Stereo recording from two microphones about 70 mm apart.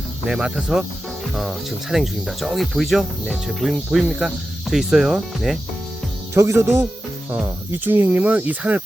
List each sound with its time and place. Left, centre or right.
0.3 s speech: centre
6.3 s speech: right
7.3 s speech: right